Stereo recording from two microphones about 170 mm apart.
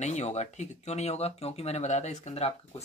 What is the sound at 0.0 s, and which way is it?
Speech, 45° left (ahead or behind).